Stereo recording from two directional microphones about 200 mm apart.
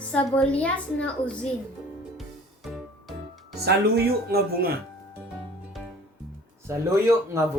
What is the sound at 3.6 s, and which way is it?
Speech, 50° right (ahead or behind).